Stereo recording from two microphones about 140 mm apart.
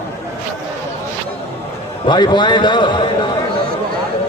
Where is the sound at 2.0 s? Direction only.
35° left (ahead or behind).